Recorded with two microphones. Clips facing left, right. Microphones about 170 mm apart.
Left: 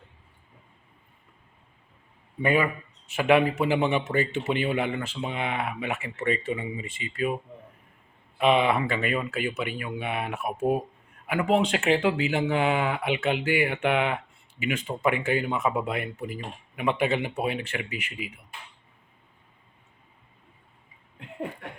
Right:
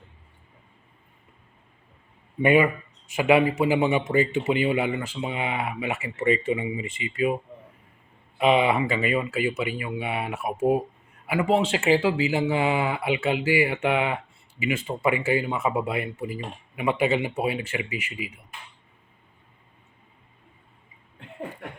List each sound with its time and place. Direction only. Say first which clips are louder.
2.4 s speech: right 5 dB; 15° right (ahead or behind)
8.4 s speech: right 1 dB; 10° right (ahead or behind)